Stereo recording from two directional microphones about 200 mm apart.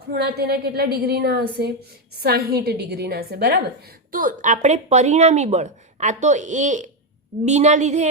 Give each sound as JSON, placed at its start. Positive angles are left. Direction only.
{"t": 0.1, "sound": "a woman's voice", "side_deg": -55}
{"t": 4.1, "sound": "a woman's voice", "side_deg": -45}